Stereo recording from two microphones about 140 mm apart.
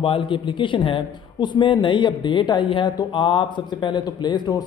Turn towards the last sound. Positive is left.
turn(degrees=30)  # may be behind; listen again after turning